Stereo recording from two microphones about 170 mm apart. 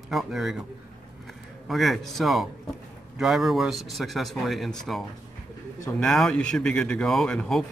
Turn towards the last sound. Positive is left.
turn(degrees=5)  # may be behind; listen again after turning